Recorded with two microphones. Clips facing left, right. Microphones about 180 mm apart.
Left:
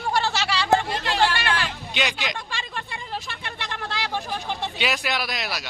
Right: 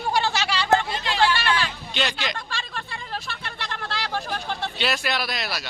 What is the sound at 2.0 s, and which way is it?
Speech, 15° left (ahead or behind).